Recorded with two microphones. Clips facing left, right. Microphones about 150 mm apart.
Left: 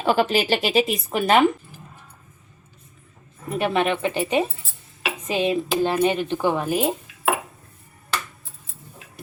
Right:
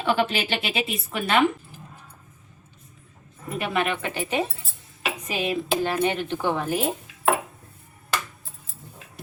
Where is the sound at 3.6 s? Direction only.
25° left (ahead or behind).